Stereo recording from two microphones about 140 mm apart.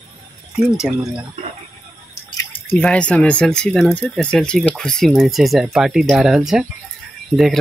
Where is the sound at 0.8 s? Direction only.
5° right (ahead or behind).